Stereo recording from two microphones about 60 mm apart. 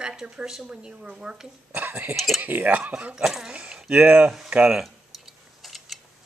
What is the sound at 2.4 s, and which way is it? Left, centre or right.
Speech, right.